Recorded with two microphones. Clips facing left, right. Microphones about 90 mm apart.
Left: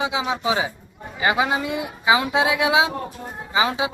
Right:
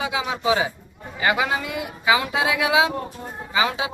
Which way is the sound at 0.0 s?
25° left (ahead or behind).